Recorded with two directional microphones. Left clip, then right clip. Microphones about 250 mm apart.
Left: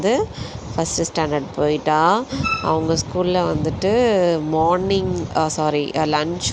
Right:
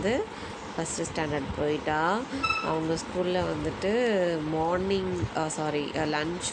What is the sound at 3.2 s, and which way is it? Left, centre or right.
Speech, left.